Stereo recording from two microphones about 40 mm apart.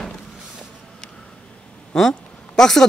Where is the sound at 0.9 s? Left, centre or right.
Centre.